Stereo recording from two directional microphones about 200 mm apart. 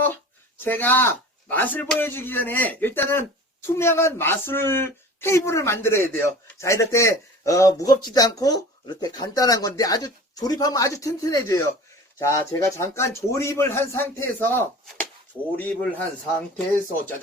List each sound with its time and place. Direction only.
0.6 s speech: 10° left (ahead or behind)